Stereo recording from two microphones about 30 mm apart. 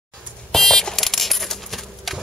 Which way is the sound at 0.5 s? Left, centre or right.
Centre.